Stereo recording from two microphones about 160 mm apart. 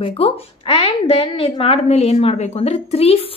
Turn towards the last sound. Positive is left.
turn(degrees=40)  # may be behind; listen again after turning